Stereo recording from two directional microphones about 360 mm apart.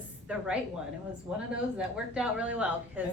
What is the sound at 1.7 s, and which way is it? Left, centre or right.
A woman's voice, centre.